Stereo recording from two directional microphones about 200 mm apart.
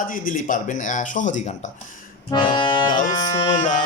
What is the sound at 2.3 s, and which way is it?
Accordion, 25° left (ahead or behind).